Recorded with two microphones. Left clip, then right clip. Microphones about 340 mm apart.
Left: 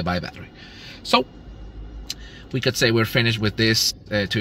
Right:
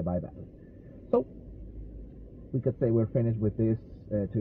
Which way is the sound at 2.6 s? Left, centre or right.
Centre.